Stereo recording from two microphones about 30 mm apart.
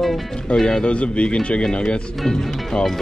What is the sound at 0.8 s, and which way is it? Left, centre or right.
Speech, left.